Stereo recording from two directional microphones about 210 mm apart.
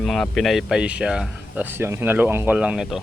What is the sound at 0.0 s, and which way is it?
Speech, centre (ahead or behind).